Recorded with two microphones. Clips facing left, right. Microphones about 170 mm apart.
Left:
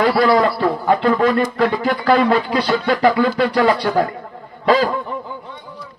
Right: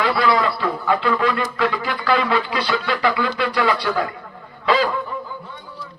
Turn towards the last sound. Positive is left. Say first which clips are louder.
# left 2 dB
turn(degrees=20)  # may be behind; listen again after turning